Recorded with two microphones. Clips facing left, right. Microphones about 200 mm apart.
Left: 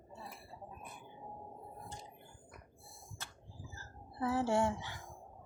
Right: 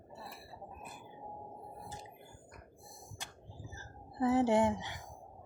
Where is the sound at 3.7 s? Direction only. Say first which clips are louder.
Right 5 dB; 20° right (ahead or behind).